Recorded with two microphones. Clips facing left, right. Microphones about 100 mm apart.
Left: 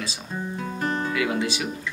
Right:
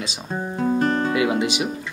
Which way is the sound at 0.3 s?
40° right (ahead or behind).